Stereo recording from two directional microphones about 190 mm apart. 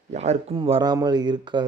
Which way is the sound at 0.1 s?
35° right (ahead or behind).